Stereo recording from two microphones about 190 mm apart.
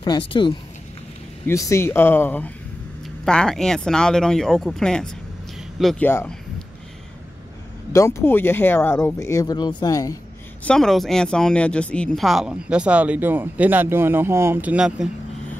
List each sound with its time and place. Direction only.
0.3 s speech: 25° left (ahead or behind)
1.5 s speech: 15° left (ahead or behind)
7.9 s speech: 15° left (ahead or behind)
10.6 s speech: 5° left (ahead or behind)